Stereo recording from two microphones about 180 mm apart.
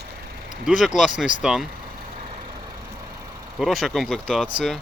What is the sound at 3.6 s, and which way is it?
Speech, centre (ahead or behind).